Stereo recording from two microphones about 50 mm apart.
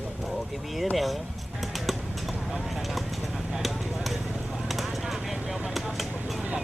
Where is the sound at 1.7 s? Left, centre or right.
Centre.